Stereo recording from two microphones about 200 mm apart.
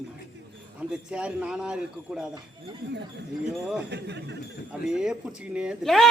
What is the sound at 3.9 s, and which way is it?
Speech, 60° right (ahead or behind).